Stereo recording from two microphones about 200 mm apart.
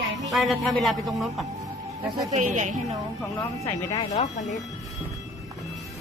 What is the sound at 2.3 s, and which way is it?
Speech, 35° right (ahead or behind).